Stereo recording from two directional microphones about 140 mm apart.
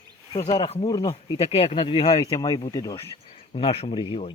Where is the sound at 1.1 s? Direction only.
45° left (ahead or behind).